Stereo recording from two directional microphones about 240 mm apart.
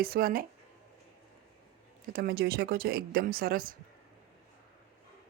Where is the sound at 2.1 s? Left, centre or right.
Right.